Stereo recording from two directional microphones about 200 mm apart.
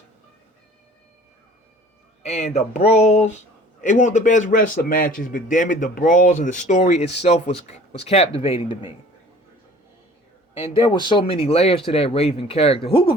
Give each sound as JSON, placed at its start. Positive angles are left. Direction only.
{"t": 2.2, "sound": "speech", "side_deg": 35}
{"t": 10.6, "sound": "speech", "side_deg": 25}